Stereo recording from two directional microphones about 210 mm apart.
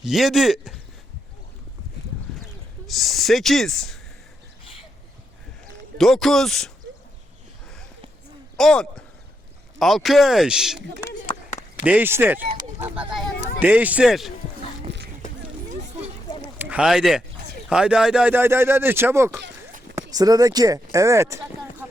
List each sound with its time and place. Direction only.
0.0 s speech: centre (ahead or behind)
2.8 s speech: centre (ahead or behind)
6.0 s speech: centre (ahead or behind)
8.5 s speech: 5° left (ahead or behind)
11.9 s speech: 10° right (ahead or behind)
14.9 s a sound: 55° right (ahead or behind)
16.6 s speech: 5° right (ahead or behind)